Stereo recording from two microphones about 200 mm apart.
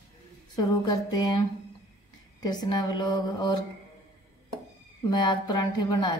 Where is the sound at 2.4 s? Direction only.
20° left (ahead or behind).